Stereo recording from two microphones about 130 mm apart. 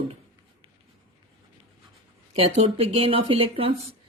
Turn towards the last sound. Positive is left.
turn(degrees=-45)  # may be behind; listen again after turning